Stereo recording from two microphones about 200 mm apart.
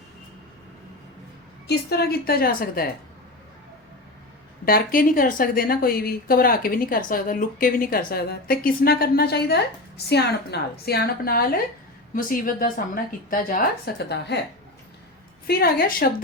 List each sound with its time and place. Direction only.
1.6 s speech: 55° left (ahead or behind)
4.6 s speech: 45° left (ahead or behind)
15.4 s speech: 50° left (ahead or behind)